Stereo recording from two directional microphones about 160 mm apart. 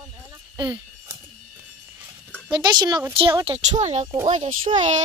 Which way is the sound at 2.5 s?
30° right (ahead or behind).